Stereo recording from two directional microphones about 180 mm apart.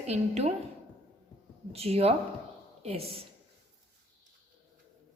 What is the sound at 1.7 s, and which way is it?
A woman's voice, 35° right (ahead or behind).